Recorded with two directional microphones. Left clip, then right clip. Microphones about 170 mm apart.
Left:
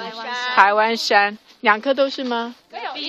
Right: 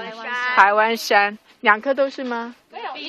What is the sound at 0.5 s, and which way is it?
Speech, 5° left (ahead or behind).